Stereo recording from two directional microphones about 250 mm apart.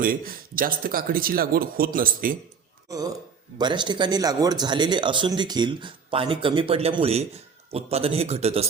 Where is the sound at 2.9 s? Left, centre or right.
Centre.